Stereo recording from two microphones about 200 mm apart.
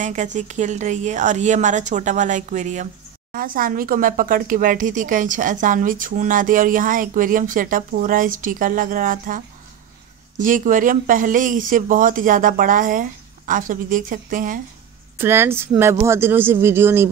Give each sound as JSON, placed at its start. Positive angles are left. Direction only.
{"t": 0.0, "sound": "speech", "side_deg": -40}
{"t": 15.1, "sound": "speech", "side_deg": -10}